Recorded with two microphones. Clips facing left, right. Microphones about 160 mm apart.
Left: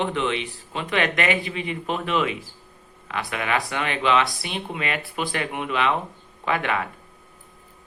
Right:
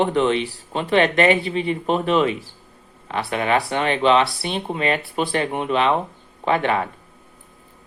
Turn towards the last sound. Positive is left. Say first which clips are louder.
# right 5 dB
turn(degrees=-30)  # may be behind; listen again after turning